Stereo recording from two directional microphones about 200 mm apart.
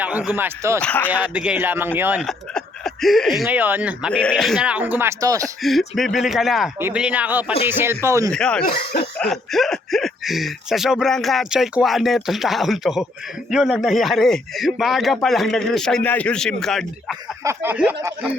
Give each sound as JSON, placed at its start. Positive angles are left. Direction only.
{"t": 0.0, "sound": "speech", "side_deg": -5}
{"t": 0.8, "sound": "speech", "side_deg": 5}
{"t": 1.1, "sound": "speech", "side_deg": -5}
{"t": 2.2, "sound": "speech", "side_deg": 0}
{"t": 4.2, "sound": "speech", "side_deg": 5}
{"t": 5.6, "sound": "speech", "side_deg": 0}
{"t": 8.3, "sound": "speech", "side_deg": 5}
{"t": 8.7, "sound": "snicker", "side_deg": 55}
{"t": 9.1, "sound": "speech", "side_deg": 0}
{"t": 17.4, "sound": "speech", "side_deg": -10}